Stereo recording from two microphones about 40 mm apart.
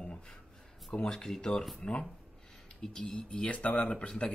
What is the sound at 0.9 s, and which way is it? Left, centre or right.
Speech, centre.